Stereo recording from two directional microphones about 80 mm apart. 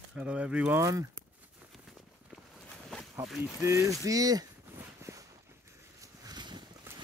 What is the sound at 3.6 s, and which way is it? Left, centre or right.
Speech, right.